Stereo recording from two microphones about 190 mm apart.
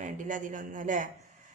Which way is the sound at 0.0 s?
45° right (ahead or behind).